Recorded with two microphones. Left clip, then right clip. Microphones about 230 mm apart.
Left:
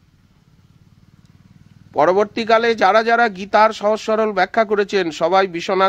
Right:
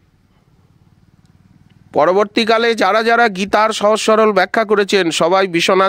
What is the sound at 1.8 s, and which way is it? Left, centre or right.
A man's voice, right.